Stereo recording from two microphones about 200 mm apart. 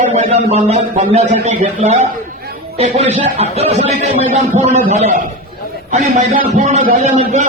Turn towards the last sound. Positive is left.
turn(degrees=-35)  # may be behind; listen again after turning